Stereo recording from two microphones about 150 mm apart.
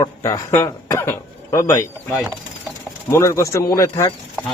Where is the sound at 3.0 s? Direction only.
20° left (ahead or behind).